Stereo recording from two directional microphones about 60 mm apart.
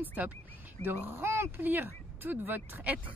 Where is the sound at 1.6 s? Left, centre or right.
Right.